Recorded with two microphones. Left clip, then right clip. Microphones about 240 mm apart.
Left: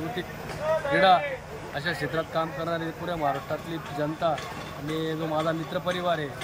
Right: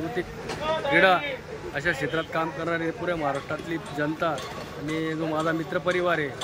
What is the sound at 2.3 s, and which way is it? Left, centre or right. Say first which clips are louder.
Speech: right 1 dB; centre.